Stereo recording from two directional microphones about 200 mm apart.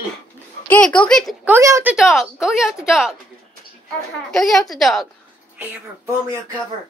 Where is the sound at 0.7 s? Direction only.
5° left (ahead or behind).